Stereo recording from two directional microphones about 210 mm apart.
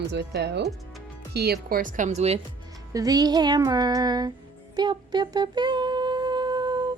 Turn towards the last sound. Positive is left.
turn(degrees=-20)  # may be behind; listen again after turning